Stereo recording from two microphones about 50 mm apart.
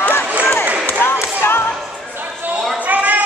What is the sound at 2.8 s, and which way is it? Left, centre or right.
Basketball bounce, right.